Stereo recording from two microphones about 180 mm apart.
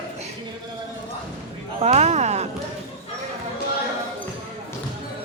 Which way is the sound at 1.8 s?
35° right (ahead or behind).